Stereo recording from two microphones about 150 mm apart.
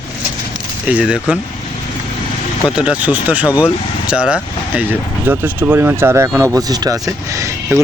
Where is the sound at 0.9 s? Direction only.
5° right (ahead or behind).